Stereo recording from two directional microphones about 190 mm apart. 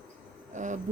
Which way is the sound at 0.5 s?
40° right (ahead or behind).